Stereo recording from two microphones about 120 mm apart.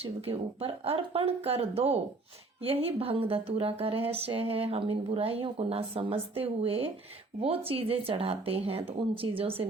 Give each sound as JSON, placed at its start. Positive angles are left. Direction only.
{"t": 0.0, "sound": "speech", "side_deg": -55}